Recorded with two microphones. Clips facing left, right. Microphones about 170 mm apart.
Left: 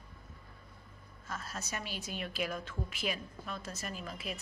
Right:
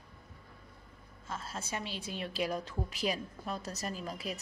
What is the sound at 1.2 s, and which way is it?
A woman's voice, 25° right (ahead or behind).